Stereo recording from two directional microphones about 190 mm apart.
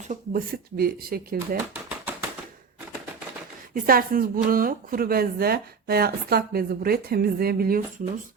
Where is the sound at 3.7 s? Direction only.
50° right (ahead or behind).